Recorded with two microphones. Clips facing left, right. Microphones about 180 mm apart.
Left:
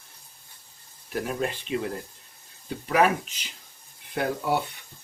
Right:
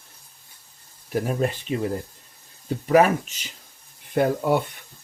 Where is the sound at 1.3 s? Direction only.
45° right (ahead or behind).